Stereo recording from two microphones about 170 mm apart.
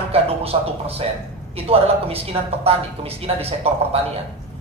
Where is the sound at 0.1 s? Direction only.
35° right (ahead or behind).